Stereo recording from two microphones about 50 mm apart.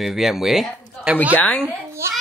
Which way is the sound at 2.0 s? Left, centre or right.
Right.